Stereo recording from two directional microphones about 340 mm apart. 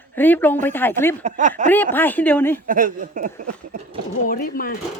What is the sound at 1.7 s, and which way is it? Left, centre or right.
Speech, centre.